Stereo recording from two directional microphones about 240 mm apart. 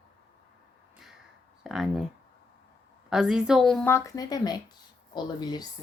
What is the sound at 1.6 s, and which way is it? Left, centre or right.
Speech, centre.